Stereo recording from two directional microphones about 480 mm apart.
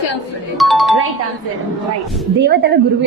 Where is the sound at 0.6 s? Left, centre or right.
Centre.